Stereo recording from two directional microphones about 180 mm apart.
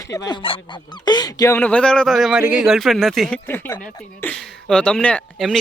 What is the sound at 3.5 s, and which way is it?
Speech, 10° left (ahead or behind).